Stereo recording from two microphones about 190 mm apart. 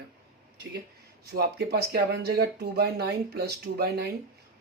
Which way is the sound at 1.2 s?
55° right (ahead or behind).